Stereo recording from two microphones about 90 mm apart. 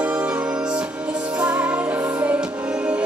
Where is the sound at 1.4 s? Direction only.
15° right (ahead or behind).